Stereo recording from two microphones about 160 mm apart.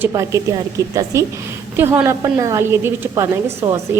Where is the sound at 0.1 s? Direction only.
20° right (ahead or behind).